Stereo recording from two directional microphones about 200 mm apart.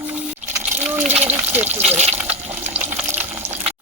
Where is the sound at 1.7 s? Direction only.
35° right (ahead or behind).